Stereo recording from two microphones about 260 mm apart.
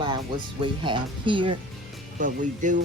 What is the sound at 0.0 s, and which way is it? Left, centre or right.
Speech, centre.